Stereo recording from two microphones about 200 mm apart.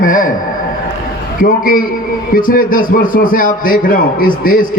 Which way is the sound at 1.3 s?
45° left (ahead or behind).